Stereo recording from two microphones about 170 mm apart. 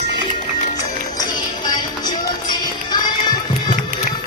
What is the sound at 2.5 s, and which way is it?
Music, 25° left (ahead or behind).